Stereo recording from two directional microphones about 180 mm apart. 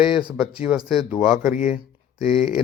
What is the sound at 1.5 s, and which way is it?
Speech, 40° left (ahead or behind).